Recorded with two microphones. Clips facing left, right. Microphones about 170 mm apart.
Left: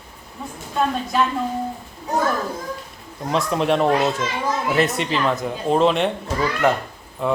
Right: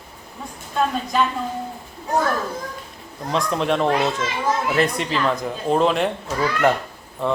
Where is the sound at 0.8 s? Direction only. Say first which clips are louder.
Even; centre (ahead or behind).